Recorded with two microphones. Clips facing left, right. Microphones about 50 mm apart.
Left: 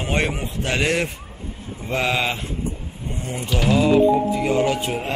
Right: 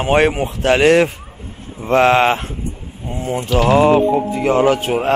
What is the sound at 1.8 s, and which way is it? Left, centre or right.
Speech, right.